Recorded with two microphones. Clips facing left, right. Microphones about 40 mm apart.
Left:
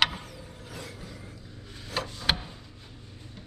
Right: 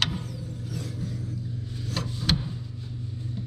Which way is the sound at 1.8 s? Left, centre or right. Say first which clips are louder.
Left 2 dB; centre.